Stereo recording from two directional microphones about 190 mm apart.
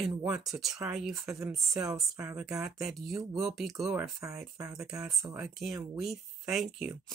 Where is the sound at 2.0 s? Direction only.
15° right (ahead or behind).